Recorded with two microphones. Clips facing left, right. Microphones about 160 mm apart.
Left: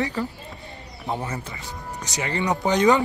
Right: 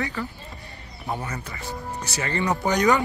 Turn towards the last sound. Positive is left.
turn(degrees=20)  # may be behind; listen again after turning